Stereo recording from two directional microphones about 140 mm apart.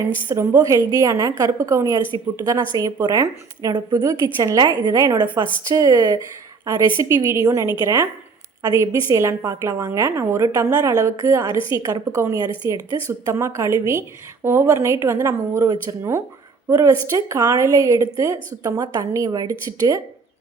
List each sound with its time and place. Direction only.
0.3 s a woman's voice: 25° right (ahead or behind)